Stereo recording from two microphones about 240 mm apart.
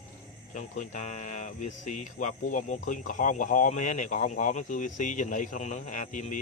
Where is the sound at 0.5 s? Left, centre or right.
Left.